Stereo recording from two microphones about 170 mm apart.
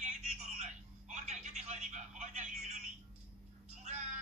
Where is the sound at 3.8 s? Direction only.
45° right (ahead or behind).